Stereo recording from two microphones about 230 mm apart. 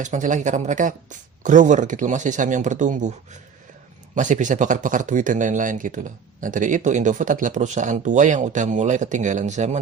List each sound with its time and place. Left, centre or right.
0.0 s speech: right
4.1 s speech: right